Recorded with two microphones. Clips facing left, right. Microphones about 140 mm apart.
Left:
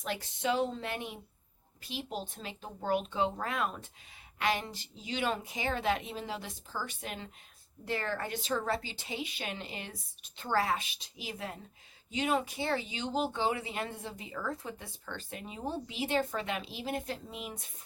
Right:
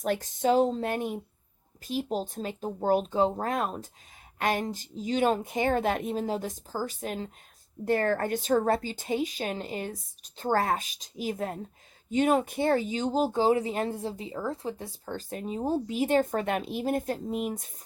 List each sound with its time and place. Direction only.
0.0 s speech: 45° right (ahead or behind)